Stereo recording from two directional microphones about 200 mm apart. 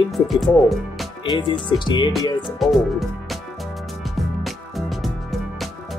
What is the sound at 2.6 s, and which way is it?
Speech, centre (ahead or behind).